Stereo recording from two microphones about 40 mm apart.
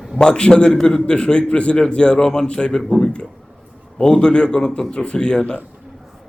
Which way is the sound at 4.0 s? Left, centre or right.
Centre.